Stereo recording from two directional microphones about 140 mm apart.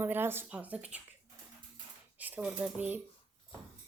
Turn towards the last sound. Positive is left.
turn(degrees=-10)  # may be behind; listen again after turning